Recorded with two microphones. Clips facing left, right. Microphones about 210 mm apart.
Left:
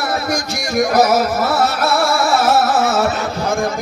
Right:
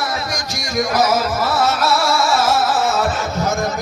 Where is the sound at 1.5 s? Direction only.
55° left (ahead or behind).